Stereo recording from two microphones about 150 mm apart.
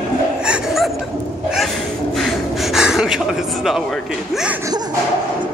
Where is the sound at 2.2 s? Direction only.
Centre (ahead or behind).